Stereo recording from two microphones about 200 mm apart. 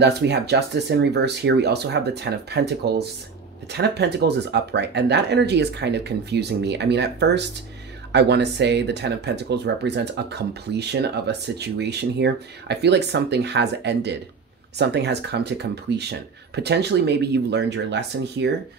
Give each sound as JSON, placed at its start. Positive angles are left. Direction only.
{"t": 0.0, "sound": "speech", "side_deg": -55}